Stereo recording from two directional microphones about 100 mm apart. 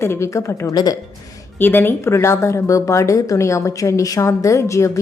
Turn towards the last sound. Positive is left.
turn(degrees=30)  # may be behind; listen again after turning